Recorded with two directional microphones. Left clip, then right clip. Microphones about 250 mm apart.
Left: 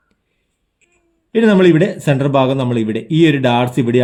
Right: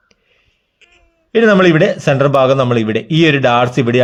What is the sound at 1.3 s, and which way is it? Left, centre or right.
A man's voice, centre.